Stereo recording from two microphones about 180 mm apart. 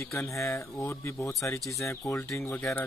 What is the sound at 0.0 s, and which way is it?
Speech, 15° left (ahead or behind).